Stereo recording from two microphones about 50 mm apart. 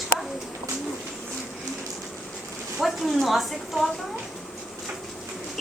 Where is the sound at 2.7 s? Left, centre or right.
Centre.